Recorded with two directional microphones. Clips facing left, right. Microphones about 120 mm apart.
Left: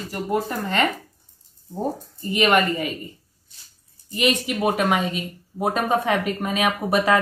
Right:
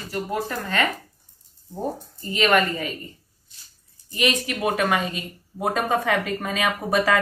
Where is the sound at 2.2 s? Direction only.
20° left (ahead or behind).